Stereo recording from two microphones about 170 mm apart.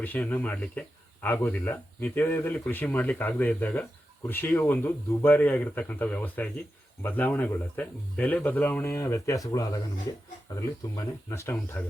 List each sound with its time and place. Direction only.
0.0 s speech: 10° left (ahead or behind)